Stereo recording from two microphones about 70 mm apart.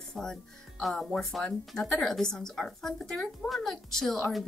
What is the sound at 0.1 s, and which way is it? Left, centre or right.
Speech, centre.